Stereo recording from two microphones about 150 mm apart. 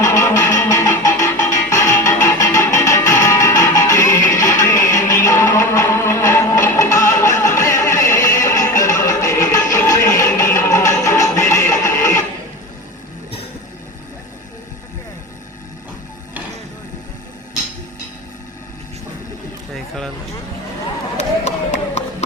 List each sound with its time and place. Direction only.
0.0 s music: 20° left (ahead or behind)
9.7 s a sound: 20° left (ahead or behind)
10.6 s music: 20° left (ahead or behind)
21.2 s run: 50° left (ahead or behind)